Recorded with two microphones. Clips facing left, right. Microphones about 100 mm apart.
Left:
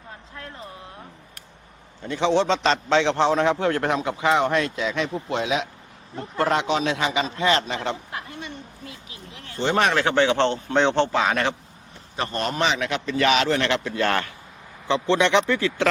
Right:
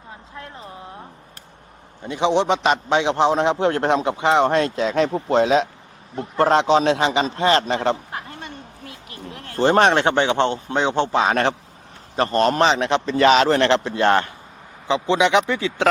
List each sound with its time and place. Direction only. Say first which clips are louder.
2.0 s a man's voice: right 2 dB; 15° right (ahead or behind); by 8.4 s 35° right (ahead or behind)
9.0 s speech: right 6 dB; 55° right (ahead or behind); by 11.2 s 15° right (ahead or behind)
11.2 s a man's voice: right 4 dB; 35° right (ahead or behind)
14.8 s a man's voice: right 2 dB; 15° right (ahead or behind)